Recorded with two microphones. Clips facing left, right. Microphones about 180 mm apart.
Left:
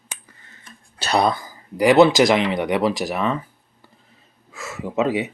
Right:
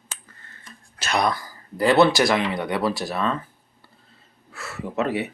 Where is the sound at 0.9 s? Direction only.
35° left (ahead or behind); by 3.3 s 15° left (ahead or behind).